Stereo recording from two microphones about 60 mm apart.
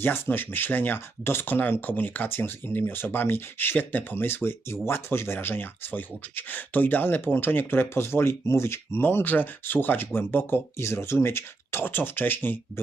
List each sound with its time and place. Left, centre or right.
0.0 s speech: left
9.0 s speech: left